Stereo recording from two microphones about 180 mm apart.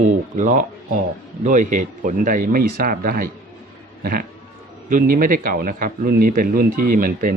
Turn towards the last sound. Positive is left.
turn(degrees=-50)  # may be behind; listen again after turning